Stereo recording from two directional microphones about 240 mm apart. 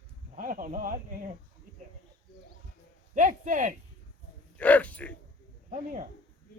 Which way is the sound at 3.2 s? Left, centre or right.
Right.